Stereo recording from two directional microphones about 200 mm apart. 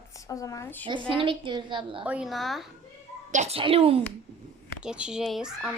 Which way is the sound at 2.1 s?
5° right (ahead or behind).